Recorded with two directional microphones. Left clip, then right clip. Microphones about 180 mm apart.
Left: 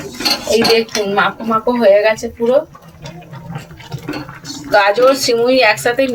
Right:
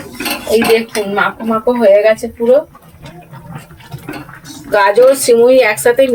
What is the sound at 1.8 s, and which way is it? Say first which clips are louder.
Speech: right 2 dB; 10° right (ahead or behind).